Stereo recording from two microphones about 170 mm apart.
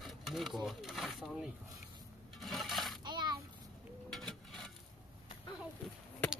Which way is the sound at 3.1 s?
25° right (ahead or behind).